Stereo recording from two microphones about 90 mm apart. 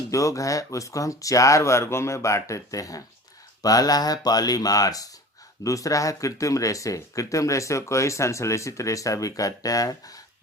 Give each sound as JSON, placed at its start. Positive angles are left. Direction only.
{"t": 0.1, "sound": "speech", "side_deg": 35}